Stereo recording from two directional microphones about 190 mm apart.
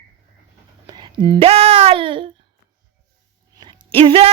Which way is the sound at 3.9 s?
30° right (ahead or behind).